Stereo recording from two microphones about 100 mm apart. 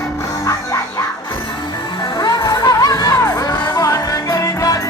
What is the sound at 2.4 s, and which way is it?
Music, 35° left (ahead or behind).